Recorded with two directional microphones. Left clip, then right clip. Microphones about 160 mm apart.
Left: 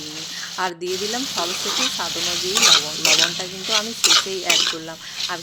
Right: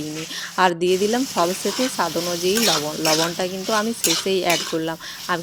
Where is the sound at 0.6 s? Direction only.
40° right (ahead or behind).